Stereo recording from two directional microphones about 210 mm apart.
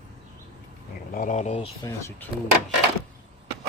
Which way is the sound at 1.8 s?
15° left (ahead or behind).